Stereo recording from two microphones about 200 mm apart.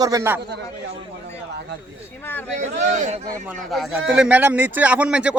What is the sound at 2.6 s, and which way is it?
Speech, 35° right (ahead or behind).